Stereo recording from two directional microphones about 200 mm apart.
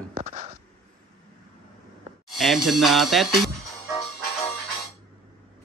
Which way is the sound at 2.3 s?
Centre (ahead or behind).